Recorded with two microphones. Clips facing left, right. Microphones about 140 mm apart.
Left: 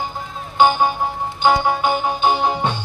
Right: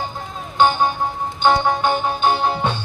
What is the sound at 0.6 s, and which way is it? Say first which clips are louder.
Music: left 1 dB; 10° left (ahead or behind).